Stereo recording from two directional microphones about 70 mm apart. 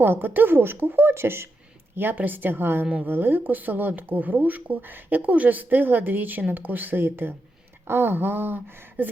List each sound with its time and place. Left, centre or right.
0.0 s a woman's voice: right
2.8 s a woman's voice: centre
3.1 s a woman's voice: right